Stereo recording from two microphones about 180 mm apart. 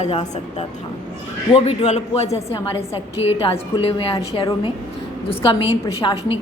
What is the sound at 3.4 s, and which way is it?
A woman's voice, 30° left (ahead or behind).